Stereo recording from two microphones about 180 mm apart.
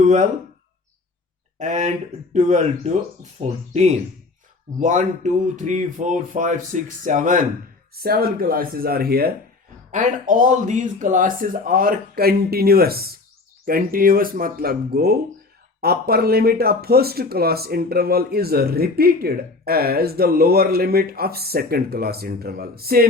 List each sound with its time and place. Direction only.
0.0 s speech: 40° right (ahead or behind)
1.5 s speech: 45° right (ahead or behind)
7.9 s speech: 60° right (ahead or behind)
9.9 s speech: 45° right (ahead or behind)